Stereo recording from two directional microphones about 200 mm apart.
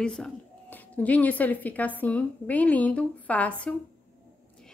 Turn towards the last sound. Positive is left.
turn(degrees=5)  # may be behind; listen again after turning